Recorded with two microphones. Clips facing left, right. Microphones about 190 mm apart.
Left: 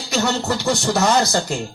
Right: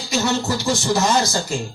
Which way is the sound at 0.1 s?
60° left (ahead or behind).